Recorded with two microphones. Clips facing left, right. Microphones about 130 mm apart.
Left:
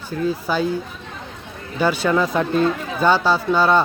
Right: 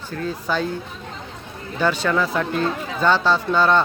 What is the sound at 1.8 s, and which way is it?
Speech, 10° left (ahead or behind).